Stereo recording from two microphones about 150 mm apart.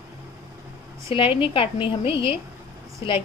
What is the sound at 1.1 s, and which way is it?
Speech, 35° left (ahead or behind).